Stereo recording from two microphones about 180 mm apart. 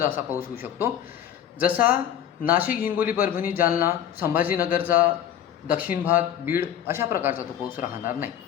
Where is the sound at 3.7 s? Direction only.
10° right (ahead or behind).